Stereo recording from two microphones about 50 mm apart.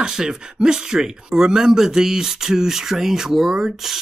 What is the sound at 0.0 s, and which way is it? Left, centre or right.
Speech, centre.